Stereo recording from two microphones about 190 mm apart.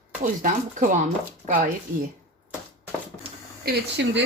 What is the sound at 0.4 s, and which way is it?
Speech, 45° right (ahead or behind).